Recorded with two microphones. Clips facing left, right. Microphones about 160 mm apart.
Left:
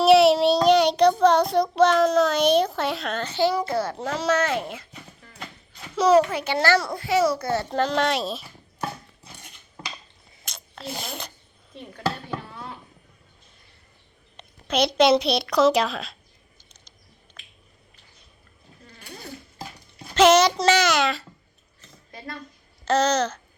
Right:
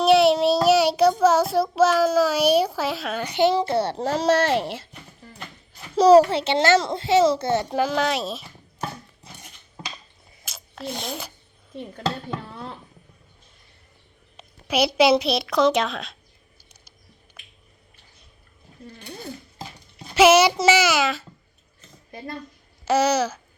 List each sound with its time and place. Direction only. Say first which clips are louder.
0.0 s child singing: left 1 dB; centre (ahead or behind); by 4.9 s 35° right (ahead or behind)
6.0 s a child's voice: right 5 dB; 35° right (ahead or behind); by 7.8 s 20° right (ahead or behind)
7.8 s speech: even; 5° right (ahead or behind)
10.4 s a sound: right 3 dB; 5° right (ahead or behind)
12.3 s a sound: right 1 dB; 30° right (ahead or behind)
14.3 s a woman's voice: right 1 dB; 5° right (ahead or behind)
20.1 s a child's voice: right 1 dB; 5° right (ahead or behind)
22.9 s a child's voice: right 1 dB; 10° right (ahead or behind)